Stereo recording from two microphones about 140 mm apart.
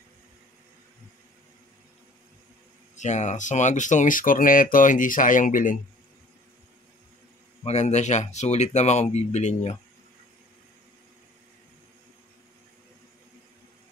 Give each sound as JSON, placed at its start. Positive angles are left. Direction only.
{"t": 3.0, "sound": "speech", "side_deg": 55}
{"t": 7.6, "sound": "speech", "side_deg": 55}